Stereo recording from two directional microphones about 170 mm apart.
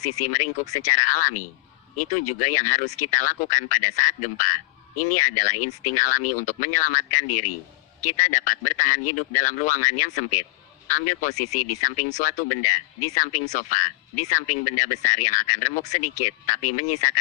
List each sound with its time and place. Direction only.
0.0 s speech: 40° left (ahead or behind)